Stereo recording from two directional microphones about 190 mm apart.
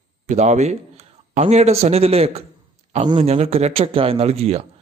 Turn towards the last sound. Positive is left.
turn(degrees=-35)  # may be behind; listen again after turning